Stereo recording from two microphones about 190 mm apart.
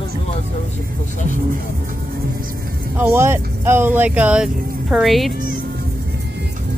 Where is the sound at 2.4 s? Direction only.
50° right (ahead or behind).